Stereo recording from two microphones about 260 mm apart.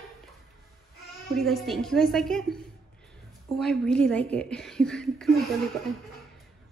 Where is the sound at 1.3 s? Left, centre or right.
Centre.